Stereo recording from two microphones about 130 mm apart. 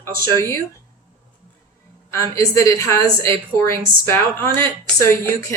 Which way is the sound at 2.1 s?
25° left (ahead or behind).